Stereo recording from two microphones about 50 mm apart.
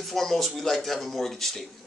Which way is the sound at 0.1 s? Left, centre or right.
Centre.